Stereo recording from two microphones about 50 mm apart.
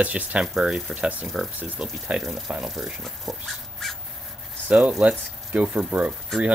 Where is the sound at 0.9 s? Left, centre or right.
Right.